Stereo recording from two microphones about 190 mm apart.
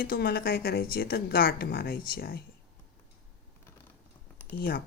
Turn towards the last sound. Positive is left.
turn(degrees=55)  # may be behind; listen again after turning